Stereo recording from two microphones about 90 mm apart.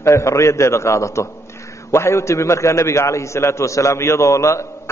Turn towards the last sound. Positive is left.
turn(degrees=35)  # may be behind; listen again after turning